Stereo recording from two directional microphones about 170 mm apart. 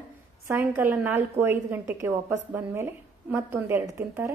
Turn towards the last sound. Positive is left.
turn(degrees=-15)  # may be behind; listen again after turning